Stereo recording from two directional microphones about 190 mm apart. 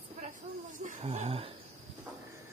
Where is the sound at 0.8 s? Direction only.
40° right (ahead or behind).